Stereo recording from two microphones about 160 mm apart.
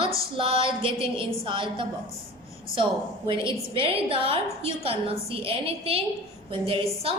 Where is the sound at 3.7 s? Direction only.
35° right (ahead or behind).